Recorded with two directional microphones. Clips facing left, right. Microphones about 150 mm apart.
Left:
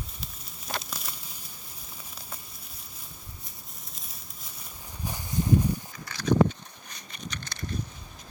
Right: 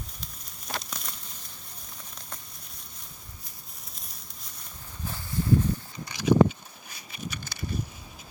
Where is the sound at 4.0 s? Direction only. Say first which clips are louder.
Left 1 dB; centre (ahead or behind).